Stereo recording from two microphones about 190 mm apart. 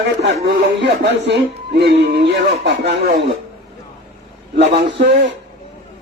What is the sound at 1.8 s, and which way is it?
Speech, 60° right (ahead or behind).